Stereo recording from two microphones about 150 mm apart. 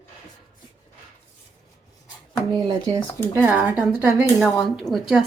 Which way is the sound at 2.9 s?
15° right (ahead or behind).